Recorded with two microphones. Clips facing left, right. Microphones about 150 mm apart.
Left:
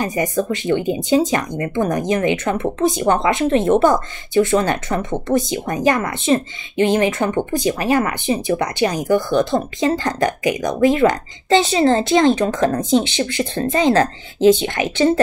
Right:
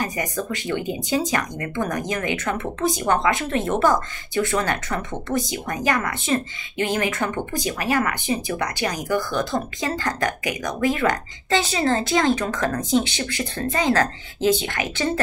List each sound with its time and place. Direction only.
0.0 s speech: 25° left (ahead or behind)